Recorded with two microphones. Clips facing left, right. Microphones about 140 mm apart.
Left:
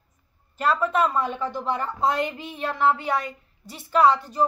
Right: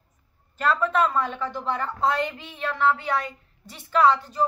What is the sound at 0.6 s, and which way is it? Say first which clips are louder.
A woman's voice: even; 10° left (ahead or behind).